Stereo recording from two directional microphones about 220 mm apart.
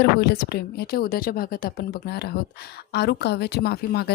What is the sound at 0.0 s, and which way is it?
A woman's voice, 45° left (ahead or behind).